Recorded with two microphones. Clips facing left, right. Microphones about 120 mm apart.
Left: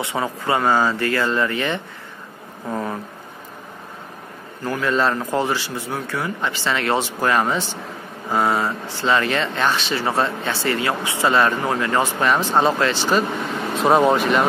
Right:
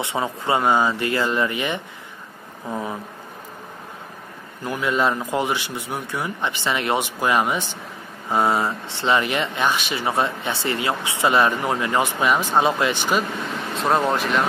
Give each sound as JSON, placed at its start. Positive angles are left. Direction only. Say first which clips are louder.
{"t": 0.0, "sound": "speech", "louder": "left 1 dB", "side_deg": -25}
{"t": 4.6, "sound": "speech", "louder": "left 1 dB", "side_deg": -15}
{"t": 8.3, "sound": "speech", "louder": "even", "side_deg": -25}
{"t": 13.7, "sound": "speech", "louder": "left 5 dB", "side_deg": 0}